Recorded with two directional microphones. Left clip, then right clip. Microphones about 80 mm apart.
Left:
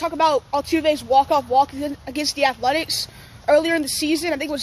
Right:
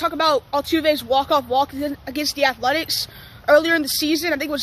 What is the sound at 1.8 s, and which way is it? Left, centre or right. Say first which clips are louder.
Speech: right 1 dB; centre.